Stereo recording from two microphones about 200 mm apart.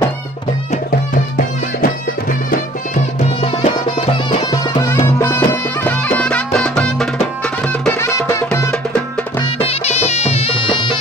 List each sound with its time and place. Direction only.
1.1 s music: 45° left (ahead or behind)
3.2 s music: 30° left (ahead or behind); by 8.6 s 15° left (ahead or behind)
9.4 s music: 30° left (ahead or behind)